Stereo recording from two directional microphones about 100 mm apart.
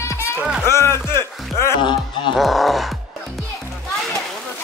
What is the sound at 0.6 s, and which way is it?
Speech, 25° left (ahead or behind).